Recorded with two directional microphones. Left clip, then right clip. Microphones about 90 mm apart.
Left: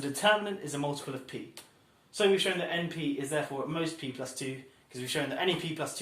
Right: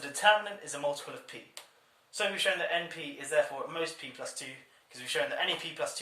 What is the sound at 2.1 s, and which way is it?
Speech, 30° left (ahead or behind).